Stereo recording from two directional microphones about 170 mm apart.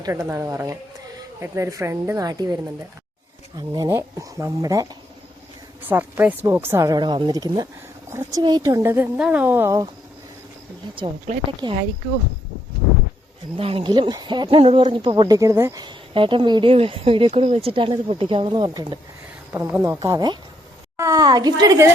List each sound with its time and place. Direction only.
0.0 s speech: 15° right (ahead or behind)
3.7 s speech: 20° right (ahead or behind)
5.9 s speech: 10° right (ahead or behind)
11.3 s speech: 40° right (ahead or behind)
13.6 s speech: 35° right (ahead or behind)
19.5 s speech: 15° right (ahead or behind)